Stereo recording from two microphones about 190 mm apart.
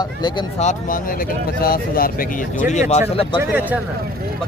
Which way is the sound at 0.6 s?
40° left (ahead or behind).